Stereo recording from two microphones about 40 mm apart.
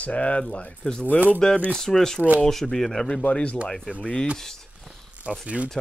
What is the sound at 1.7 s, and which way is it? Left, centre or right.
Speech, centre.